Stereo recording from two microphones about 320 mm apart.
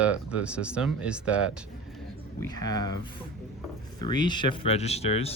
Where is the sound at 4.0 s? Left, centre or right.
Centre.